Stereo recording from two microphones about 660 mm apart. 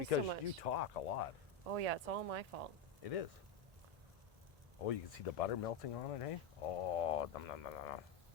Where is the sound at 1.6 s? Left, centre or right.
Right.